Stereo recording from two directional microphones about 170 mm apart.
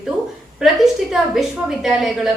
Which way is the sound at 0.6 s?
Centre (ahead or behind).